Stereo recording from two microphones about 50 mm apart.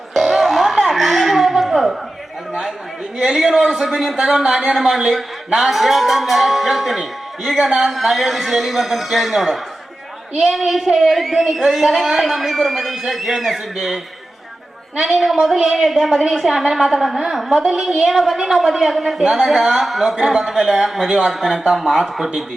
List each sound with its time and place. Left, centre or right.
0.1 s a sound: centre
3.2 s a man's voice: centre
15.3 s speech: centre
15.5 s a man's voice: centre
15.8 s a man's voice: centre